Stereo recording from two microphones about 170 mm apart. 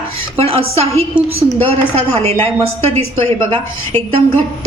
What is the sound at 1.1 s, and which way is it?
Speech, 5° right (ahead or behind).